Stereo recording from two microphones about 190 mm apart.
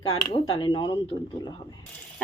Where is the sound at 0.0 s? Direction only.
25° left (ahead or behind).